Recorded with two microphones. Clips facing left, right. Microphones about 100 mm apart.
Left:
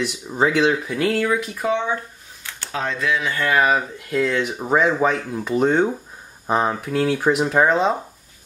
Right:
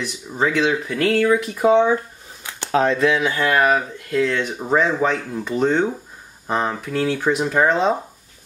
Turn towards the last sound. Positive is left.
turn(degrees=0)  # may be behind; listen again after turning